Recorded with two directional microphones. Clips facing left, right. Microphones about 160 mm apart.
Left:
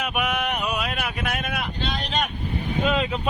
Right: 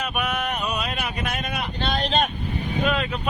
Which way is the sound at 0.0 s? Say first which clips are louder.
Left 1 dB; 10° left (ahead or behind).